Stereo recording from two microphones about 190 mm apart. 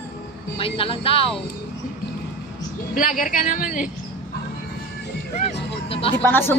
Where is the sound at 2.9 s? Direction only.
45° left (ahead or behind).